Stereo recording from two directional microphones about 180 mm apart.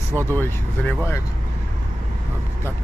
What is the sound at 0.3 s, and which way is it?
Speech, 10° left (ahead or behind).